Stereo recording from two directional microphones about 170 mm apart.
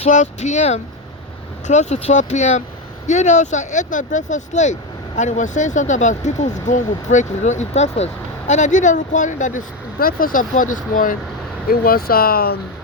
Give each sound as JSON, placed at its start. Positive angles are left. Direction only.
{"t": 0.0, "sound": "speech", "side_deg": 45}